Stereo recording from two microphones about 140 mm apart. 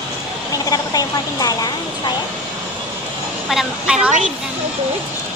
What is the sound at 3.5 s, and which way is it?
Speech, 5° right (ahead or behind).